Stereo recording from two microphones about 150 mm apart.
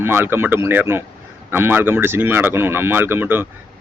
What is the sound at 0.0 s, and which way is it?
Speech, 15° right (ahead or behind).